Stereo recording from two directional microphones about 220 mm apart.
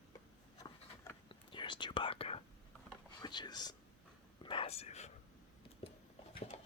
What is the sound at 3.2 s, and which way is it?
Speech, 20° left (ahead or behind).